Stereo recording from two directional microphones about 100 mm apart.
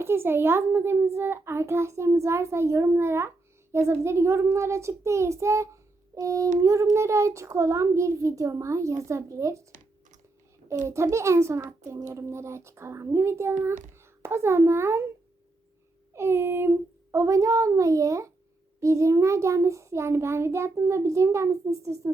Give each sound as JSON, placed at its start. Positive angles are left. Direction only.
{"t": 0.0, "sound": "a child's voice", "side_deg": -25}
{"t": 10.7, "sound": "a child's voice", "side_deg": -30}
{"t": 16.1, "sound": "a child's voice", "side_deg": -25}